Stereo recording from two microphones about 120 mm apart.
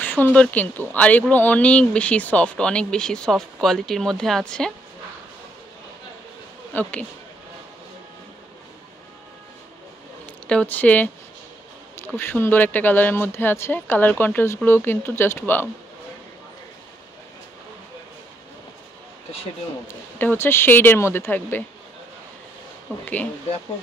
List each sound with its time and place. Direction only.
0.0 s speech: 15° left (ahead or behind)
6.7 s speech: 15° left (ahead or behind)
10.2 s speech: 10° left (ahead or behind)
12.2 s speech: 20° left (ahead or behind)
20.2 s speech: 20° left (ahead or behind)
22.9 s speech: 10° left (ahead or behind)